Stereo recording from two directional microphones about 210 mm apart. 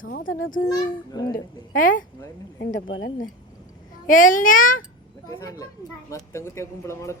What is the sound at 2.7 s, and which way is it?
Speech, 65° left (ahead or behind).